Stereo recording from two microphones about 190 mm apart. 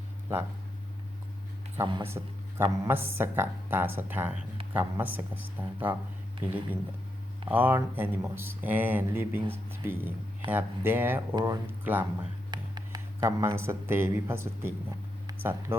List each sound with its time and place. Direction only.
1.8 s speech: 25° right (ahead or behind)
2.0 s speech: 15° right (ahead or behind)
12.5 s speech: 20° right (ahead or behind)
15.3 s a sound: 10° right (ahead or behind)